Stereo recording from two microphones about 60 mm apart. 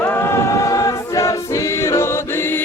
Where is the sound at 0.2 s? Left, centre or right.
Left.